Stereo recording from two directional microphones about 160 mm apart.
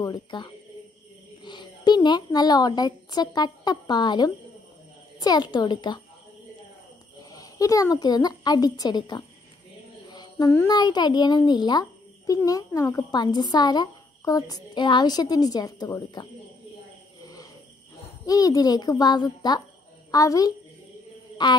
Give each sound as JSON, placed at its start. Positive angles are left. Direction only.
{"t": 0.0, "sound": "a child's voice", "side_deg": 25}
{"t": 7.3, "sound": "a child's voice", "side_deg": 20}
{"t": 10.1, "sound": "a sound", "side_deg": 20}
{"t": 10.8, "sound": "a child's voice", "side_deg": 25}
{"t": 17.2, "sound": "cricket", "side_deg": 20}
{"t": 18.2, "sound": "a child's voice", "side_deg": 20}